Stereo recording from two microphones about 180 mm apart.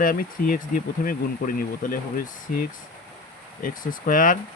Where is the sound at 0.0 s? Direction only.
50° left (ahead or behind).